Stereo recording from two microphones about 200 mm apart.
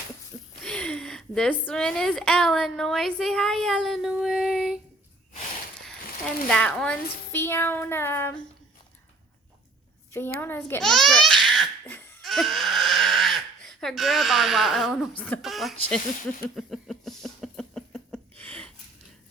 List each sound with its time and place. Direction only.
0.6 s a woman's voice: 5° left (ahead or behind)
5.8 s speech: 5° left (ahead or behind)
10.1 s a woman's voice: 10° left (ahead or behind)
10.7 s babbling: 5° left (ahead or behind)
11.9 s a sound: 10° left (ahead or behind)
15.2 s speech: 5° left (ahead or behind)
16.6 s a sound: centre (ahead or behind)